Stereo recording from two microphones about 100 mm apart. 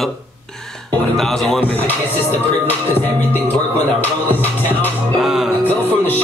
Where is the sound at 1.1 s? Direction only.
5° left (ahead or behind).